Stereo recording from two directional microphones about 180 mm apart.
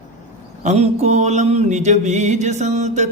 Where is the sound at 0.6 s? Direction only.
40° right (ahead or behind).